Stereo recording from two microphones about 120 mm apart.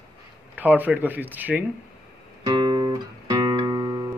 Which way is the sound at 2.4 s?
40° right (ahead or behind).